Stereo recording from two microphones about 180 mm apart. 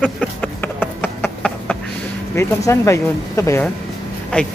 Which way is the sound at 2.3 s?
15° left (ahead or behind).